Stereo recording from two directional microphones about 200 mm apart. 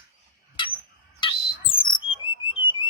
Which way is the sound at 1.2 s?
25° left (ahead or behind).